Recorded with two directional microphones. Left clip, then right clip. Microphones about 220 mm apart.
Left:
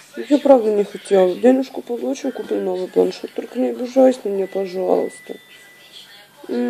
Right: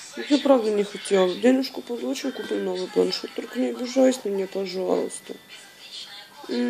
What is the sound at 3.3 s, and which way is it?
Speech, centre (ahead or behind).